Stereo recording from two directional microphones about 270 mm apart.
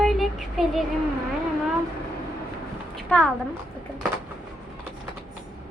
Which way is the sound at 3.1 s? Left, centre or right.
Centre.